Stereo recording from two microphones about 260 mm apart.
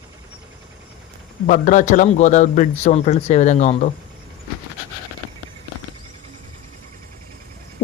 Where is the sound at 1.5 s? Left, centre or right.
Left.